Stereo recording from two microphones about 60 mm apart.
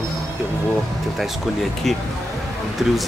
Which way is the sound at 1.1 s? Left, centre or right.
Centre.